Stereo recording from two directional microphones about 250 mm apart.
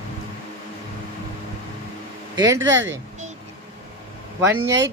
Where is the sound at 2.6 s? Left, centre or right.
Right.